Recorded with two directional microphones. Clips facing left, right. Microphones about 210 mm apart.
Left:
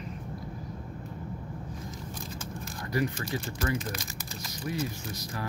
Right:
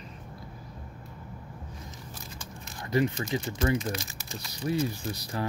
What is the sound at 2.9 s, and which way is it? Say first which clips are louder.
Speech: right 4 dB; 20° right (ahead or behind).